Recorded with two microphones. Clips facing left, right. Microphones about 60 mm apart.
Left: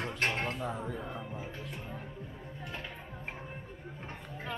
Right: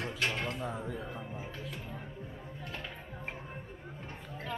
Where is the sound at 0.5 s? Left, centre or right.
Centre.